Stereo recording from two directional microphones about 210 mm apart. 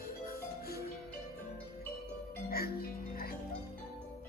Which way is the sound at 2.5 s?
45° left (ahead or behind).